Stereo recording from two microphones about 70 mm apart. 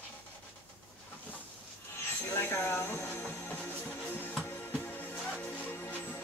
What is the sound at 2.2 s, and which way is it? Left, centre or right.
Music, left.